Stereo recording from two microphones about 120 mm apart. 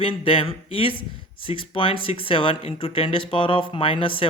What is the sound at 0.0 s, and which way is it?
Speech, 50° left (ahead or behind).